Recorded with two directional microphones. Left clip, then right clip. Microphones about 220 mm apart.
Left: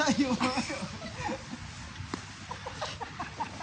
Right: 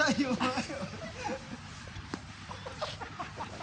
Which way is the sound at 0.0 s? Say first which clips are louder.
Left 1 dB; centre (ahead or behind).